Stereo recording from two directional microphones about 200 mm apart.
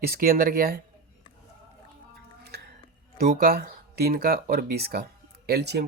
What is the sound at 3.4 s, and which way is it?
Speech, 50° right (ahead or behind).